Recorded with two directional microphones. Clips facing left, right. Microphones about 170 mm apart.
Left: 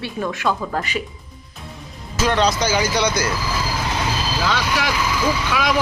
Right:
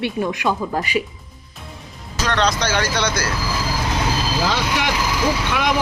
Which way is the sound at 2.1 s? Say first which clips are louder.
Left 2 dB; 5° left (ahead or behind).